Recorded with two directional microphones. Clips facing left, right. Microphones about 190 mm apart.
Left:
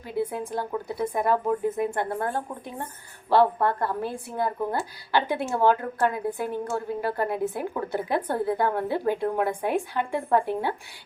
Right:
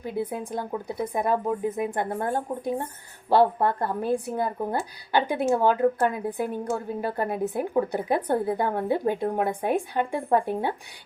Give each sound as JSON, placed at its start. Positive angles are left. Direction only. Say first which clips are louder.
{"t": 0.2, "sound": "speech", "louder": "left 3 dB", "side_deg": -20}